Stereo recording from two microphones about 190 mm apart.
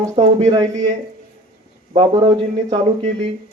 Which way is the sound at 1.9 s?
25° right (ahead or behind).